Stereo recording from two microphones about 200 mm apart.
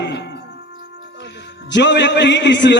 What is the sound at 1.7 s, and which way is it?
A man's voice, 60° left (ahead or behind).